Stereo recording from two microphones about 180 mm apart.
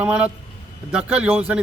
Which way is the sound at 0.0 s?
5° right (ahead or behind).